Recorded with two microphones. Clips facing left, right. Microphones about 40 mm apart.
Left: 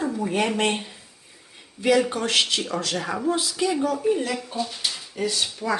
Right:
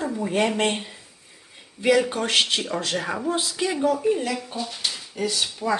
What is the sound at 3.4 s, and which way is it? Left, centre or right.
Speech, right.